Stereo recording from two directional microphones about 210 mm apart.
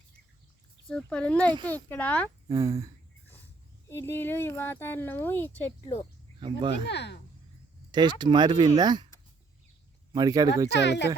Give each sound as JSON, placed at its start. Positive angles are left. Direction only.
{"t": 0.9, "sound": "speech", "side_deg": 5}
{"t": 2.5, "sound": "speech", "side_deg": -15}
{"t": 3.8, "sound": "speech", "side_deg": 10}
{"t": 6.4, "sound": "speech", "side_deg": -25}
{"t": 6.8, "sound": "speech", "side_deg": 55}
{"t": 7.9, "sound": "speech", "side_deg": -20}
{"t": 10.1, "sound": "speech", "side_deg": -20}
{"t": 10.7, "sound": "speech", "side_deg": 55}